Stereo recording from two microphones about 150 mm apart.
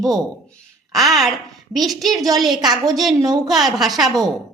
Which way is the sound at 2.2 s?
25° right (ahead or behind).